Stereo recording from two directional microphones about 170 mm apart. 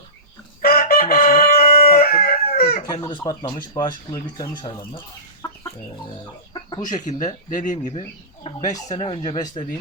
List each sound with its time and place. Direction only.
0.6 s chicken: 65° left (ahead or behind)
2.8 s speech: 25° left (ahead or behind)
7.0 s speech: 45° left (ahead or behind)
8.4 s speech: 20° left (ahead or behind)